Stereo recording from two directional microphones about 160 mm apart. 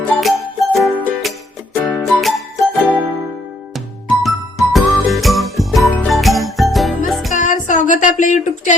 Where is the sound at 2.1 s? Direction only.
Centre (ahead or behind).